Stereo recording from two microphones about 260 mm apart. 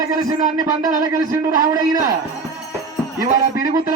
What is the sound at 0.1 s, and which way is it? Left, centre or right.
A man's voice, centre.